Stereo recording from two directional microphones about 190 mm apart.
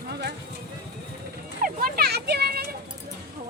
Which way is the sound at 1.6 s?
55° right (ahead or behind).